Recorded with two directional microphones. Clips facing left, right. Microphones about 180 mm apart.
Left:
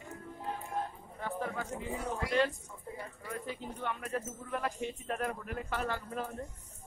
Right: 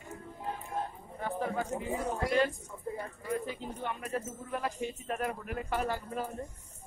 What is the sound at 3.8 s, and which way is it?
Speech, 10° right (ahead or behind).